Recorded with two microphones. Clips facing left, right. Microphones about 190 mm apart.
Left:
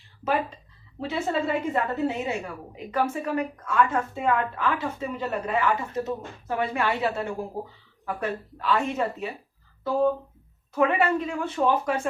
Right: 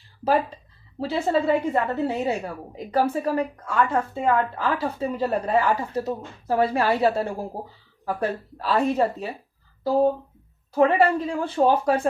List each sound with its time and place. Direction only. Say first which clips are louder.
0.9 s a woman's voice: right 4 dB; 35° right (ahead or behind)